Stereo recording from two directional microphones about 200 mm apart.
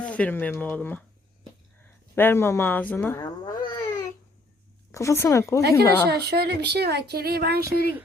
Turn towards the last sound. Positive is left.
turn(degrees=-50)  # may be behind; listen again after turning